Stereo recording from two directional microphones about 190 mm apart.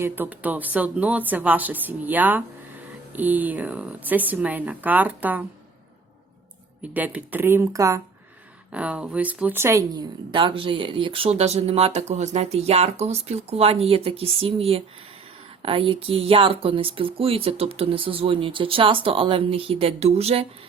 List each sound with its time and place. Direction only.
0.0 s speech: 10° right (ahead or behind)
6.9 s speech: 10° right (ahead or behind)
8.7 s speech: 5° right (ahead or behind); by 20.5 s 30° right (ahead or behind)